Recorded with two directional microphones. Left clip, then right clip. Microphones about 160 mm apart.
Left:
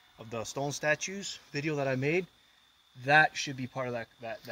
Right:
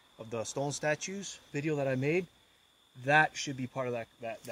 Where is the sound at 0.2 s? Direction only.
50° left (ahead or behind).